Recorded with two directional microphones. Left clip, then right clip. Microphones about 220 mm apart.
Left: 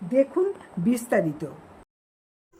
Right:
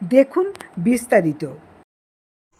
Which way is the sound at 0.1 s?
25° right (ahead or behind).